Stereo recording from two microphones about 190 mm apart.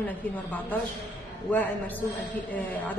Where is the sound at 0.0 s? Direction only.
10° left (ahead or behind).